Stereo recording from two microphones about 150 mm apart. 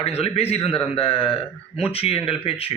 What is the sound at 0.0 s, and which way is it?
A man's voice, 40° left (ahead or behind).